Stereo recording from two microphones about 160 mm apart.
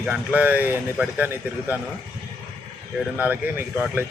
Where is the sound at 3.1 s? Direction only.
10° right (ahead or behind).